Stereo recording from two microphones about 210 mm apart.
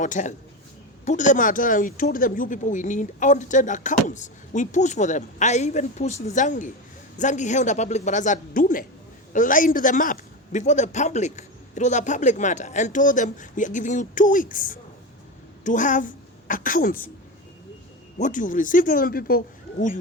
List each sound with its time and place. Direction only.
0.0 s a woman's voice: 35° left (ahead or behind)
18.2 s speech: 35° left (ahead or behind)